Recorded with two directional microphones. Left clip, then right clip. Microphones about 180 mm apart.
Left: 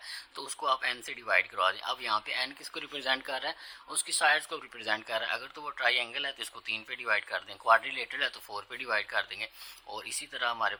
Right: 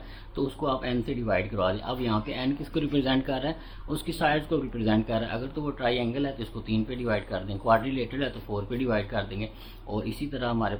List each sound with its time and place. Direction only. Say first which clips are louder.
0.3 s speech: right 3 dB; 45° left (ahead or behind)